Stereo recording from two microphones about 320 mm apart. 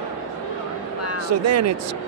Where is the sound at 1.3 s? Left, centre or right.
Right.